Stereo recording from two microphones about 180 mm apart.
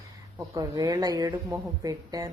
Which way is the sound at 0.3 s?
20° right (ahead or behind).